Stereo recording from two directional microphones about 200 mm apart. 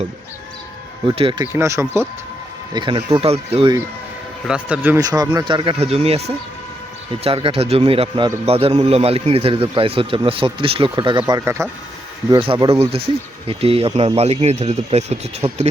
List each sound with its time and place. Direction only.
1.0 s a man's voice: 25° right (ahead or behind)
1.5 s speech: 15° right (ahead or behind)
2.7 s a man's voice: 25° right (ahead or behind)
4.4 s a man's voice: 5° right (ahead or behind); by 15.7 s 30° right (ahead or behind)